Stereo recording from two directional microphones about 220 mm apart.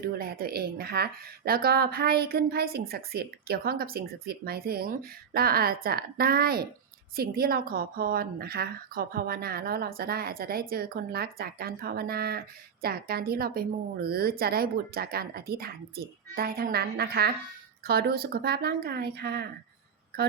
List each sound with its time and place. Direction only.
0.0 s speech: 45° right (ahead or behind)